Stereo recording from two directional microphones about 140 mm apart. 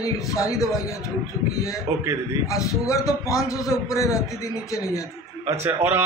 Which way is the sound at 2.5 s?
25° left (ahead or behind).